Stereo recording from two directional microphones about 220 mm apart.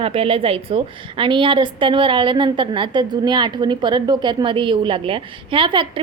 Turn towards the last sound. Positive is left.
turn(degrees=-25)  # may be behind; listen again after turning